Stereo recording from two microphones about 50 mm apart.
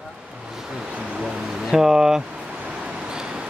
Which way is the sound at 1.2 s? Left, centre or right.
Centre.